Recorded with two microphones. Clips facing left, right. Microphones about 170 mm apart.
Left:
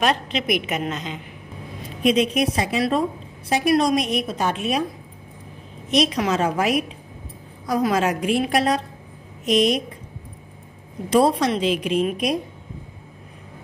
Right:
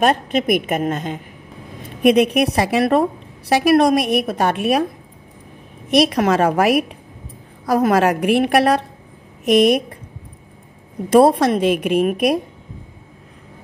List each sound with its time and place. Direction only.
0.0 s a woman's voice: 50° right (ahead or behind)
1.8 s a woman's voice: 65° right (ahead or behind)
5.9 s a woman's voice: 60° right (ahead or behind)
11.1 s a woman's voice: 55° right (ahead or behind)